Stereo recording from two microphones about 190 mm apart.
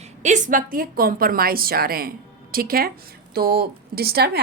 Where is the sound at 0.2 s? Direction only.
40° right (ahead or behind).